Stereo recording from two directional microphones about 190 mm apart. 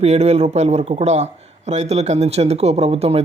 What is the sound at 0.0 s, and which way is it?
A man's voice, 35° right (ahead or behind).